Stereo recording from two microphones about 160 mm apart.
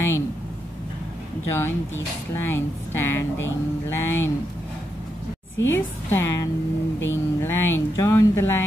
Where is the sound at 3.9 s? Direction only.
15° left (ahead or behind).